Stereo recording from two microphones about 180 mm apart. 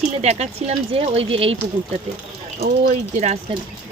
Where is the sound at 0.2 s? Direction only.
40° right (ahead or behind).